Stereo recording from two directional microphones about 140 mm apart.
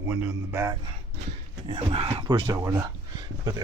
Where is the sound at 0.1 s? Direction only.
15° right (ahead or behind).